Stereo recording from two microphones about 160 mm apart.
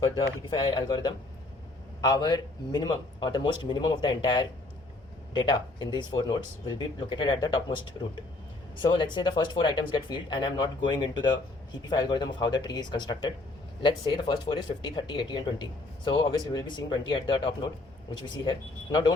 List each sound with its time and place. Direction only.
0.7 s speech: 30° left (ahead or behind)